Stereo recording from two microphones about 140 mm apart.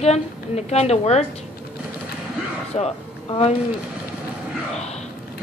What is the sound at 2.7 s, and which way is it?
Speech, 45° left (ahead or behind).